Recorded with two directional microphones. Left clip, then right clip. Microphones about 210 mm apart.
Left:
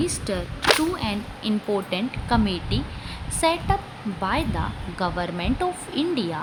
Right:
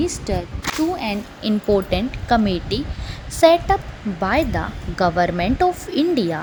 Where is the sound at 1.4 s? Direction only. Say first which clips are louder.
Right 8 dB; 25° right (ahead or behind).